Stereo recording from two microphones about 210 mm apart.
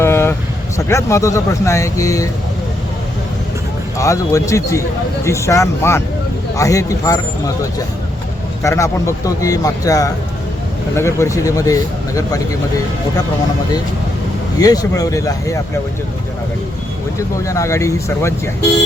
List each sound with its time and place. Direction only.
0.0 s vehicle: 10° left (ahead or behind)
0.9 s a man's voice: 15° left (ahead or behind)
3.9 s a man's voice: 15° left (ahead or behind)
8.6 s a man's voice: 15° left (ahead or behind)
14.6 s a man's voice: 15° left (ahead or behind)
17.2 s a man's voice: 15° left (ahead or behind)